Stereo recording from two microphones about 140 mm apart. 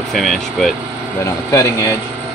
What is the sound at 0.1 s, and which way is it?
Speech, centre (ahead or behind).